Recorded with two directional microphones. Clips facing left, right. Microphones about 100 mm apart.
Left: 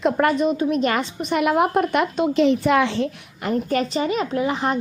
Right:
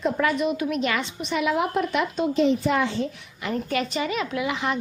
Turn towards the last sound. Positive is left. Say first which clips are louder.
# left 4 dB
turn(degrees=40)  # may be behind; listen again after turning